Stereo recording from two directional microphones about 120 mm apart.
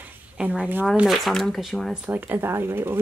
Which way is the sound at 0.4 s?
10° right (ahead or behind).